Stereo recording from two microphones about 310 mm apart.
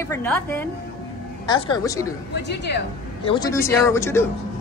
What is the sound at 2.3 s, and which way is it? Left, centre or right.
Speech, left.